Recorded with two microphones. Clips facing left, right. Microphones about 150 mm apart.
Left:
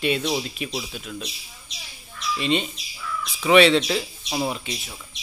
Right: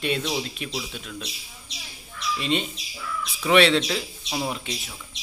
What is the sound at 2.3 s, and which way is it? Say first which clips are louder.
Speech: left 3 dB; centre (ahead or behind).